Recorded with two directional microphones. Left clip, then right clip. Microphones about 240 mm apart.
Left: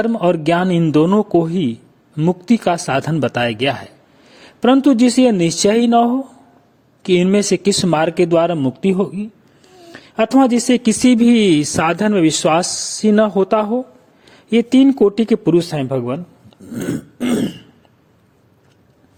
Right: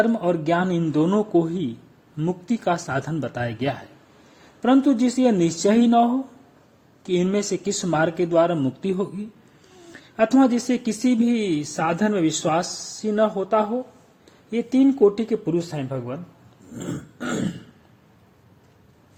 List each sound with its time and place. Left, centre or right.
0.0 s speech: left